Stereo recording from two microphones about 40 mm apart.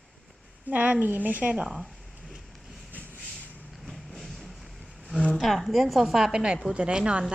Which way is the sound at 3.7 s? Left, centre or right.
Centre.